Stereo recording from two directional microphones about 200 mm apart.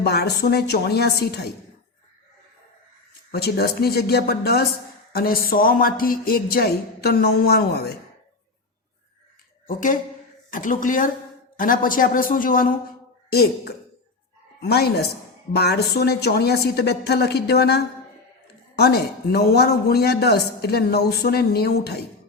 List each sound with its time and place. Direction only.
0.0 s a man's voice: 55° left (ahead or behind)
3.3 s a man's voice: 50° left (ahead or behind)
9.6 s a man's voice: 40° left (ahead or behind)